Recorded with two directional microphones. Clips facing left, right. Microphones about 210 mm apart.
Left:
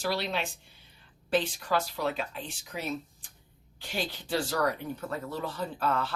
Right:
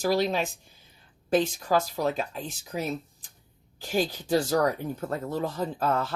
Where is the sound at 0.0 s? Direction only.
45° right (ahead or behind).